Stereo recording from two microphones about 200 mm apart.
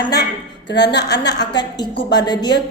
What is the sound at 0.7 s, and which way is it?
A woman's voice, 60° left (ahead or behind).